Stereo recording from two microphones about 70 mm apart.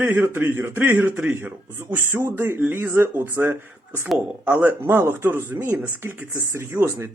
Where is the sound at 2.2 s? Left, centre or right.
Right.